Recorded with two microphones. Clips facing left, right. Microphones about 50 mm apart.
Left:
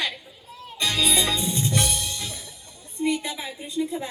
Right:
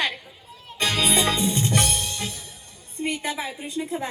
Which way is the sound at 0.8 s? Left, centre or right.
Right.